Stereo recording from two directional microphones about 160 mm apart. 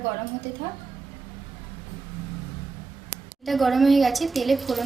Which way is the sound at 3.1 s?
Centre (ahead or behind).